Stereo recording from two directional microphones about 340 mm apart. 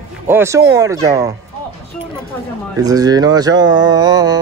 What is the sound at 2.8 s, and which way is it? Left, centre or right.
Speech, centre.